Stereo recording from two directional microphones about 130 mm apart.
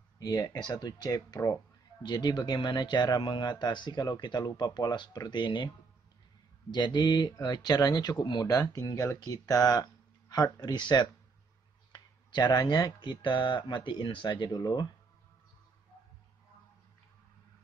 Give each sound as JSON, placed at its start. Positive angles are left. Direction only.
{"t": 0.2, "sound": "speech", "side_deg": 30}
{"t": 6.7, "sound": "speech", "side_deg": 35}